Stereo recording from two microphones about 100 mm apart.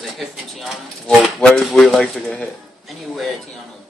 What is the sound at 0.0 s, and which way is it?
Speech, centre (ahead or behind).